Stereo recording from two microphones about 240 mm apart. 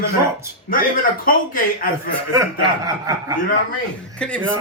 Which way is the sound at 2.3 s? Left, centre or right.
Centre.